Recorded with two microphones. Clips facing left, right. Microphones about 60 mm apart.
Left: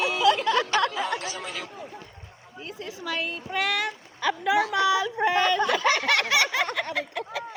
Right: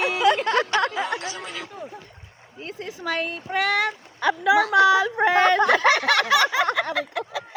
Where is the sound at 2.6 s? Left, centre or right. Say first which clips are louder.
Right 4 dB; right.